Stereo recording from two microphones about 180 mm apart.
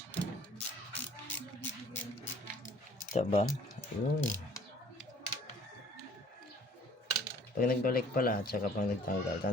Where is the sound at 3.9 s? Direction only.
40° left (ahead or behind).